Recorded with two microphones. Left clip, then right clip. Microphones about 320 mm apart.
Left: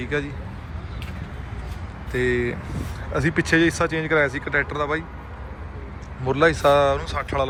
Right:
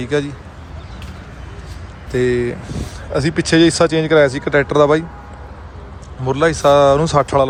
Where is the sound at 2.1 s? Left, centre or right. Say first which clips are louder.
Right 6 dB; centre.